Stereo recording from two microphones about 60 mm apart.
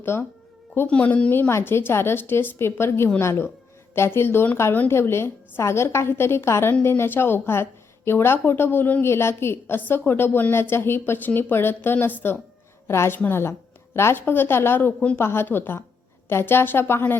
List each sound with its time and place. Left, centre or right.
0.0 s speech: left
0.9 s a woman's voice: left
1.3 s a woman's voice: left
12.9 s a woman's voice: left